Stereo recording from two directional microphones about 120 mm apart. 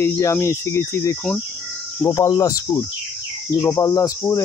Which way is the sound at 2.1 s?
30° left (ahead or behind).